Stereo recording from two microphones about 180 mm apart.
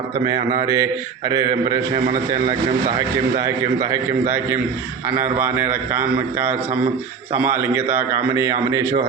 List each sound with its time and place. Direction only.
0.3 s a man's voice: 20° right (ahead or behind)
4.3 s a man's voice: 10° right (ahead or behind)